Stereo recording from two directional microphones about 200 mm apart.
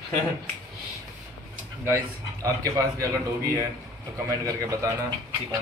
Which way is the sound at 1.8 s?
15° right (ahead or behind).